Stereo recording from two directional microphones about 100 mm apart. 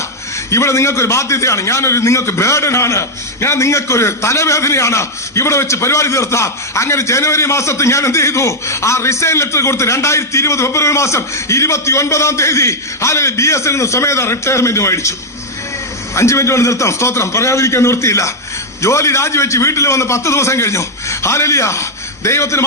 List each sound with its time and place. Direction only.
0.5 s a man's voice: 30° left (ahead or behind)
16.1 s a man's voice: 30° left (ahead or behind)